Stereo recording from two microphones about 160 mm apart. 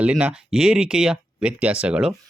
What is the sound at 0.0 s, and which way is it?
Speech, 10° right (ahead or behind).